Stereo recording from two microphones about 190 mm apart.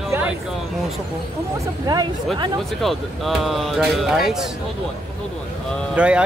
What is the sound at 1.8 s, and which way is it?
Speech, 20° right (ahead or behind).